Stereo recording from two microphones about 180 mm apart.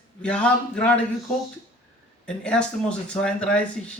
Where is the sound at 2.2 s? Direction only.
5° left (ahead or behind).